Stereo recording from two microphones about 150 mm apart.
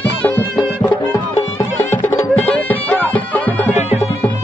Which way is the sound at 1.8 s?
15° left (ahead or behind).